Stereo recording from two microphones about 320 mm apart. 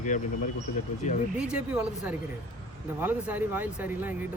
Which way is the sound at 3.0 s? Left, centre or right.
Centre.